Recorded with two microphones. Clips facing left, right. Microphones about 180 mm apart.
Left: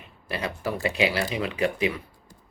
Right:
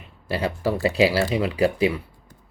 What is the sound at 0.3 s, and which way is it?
Speech, 30° right (ahead or behind).